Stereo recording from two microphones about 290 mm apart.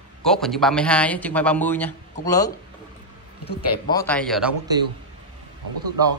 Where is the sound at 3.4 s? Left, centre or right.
Left.